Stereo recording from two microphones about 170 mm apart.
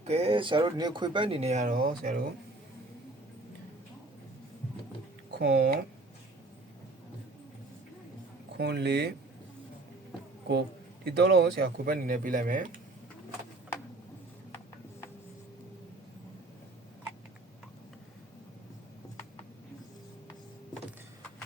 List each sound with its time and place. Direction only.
0.1 s speech: 35° right (ahead or behind); by 2.2 s 55° right (ahead or behind)
5.3 s speech: 80° right
8.5 s speech: 80° right
11.0 s speech: 70° right (ahead or behind); by 12.6 s 50° right (ahead or behind)